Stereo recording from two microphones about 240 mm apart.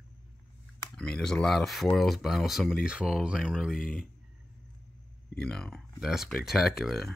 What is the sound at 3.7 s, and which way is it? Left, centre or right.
Speech, left.